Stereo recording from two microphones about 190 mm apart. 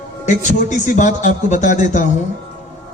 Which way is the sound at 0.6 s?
40° left (ahead or behind).